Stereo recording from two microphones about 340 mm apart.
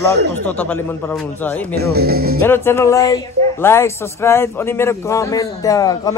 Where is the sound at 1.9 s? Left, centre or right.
Right.